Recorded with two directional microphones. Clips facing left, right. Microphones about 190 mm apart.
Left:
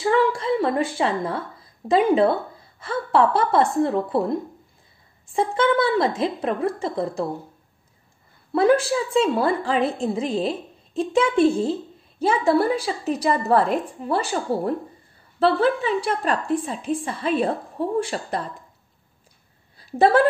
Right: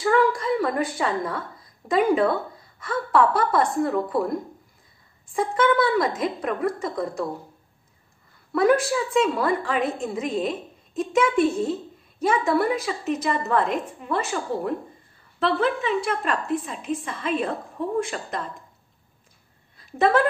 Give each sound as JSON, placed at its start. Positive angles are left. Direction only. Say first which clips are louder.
{"t": 0.0, "sound": "a woman's voice", "louder": "left 1 dB", "side_deg": 25}
{"t": 8.5, "sound": "a woman's voice", "louder": "left 2 dB", "side_deg": 30}
{"t": 19.9, "sound": "a woman's voice", "louder": "left 3 dB", "side_deg": 35}